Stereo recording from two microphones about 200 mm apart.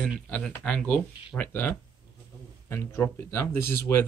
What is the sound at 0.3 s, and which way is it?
Speech, 5° left (ahead or behind).